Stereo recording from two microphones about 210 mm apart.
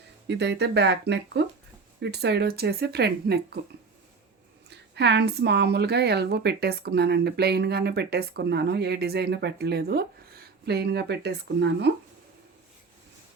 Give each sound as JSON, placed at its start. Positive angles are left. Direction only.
{"t": 0.3, "sound": "a woman's voice", "side_deg": -55}
{"t": 4.9, "sound": "a woman's voice", "side_deg": -55}